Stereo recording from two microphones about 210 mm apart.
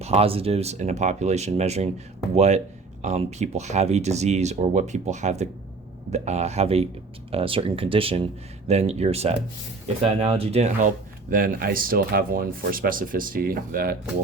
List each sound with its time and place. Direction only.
0.0 s speech: 30° right (ahead or behind); by 13.9 s 45° right (ahead or behind)